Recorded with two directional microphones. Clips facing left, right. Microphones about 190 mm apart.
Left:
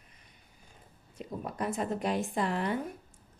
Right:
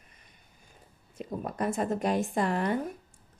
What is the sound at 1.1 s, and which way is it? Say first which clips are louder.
Speech: right 3 dB; 45° right (ahead or behind).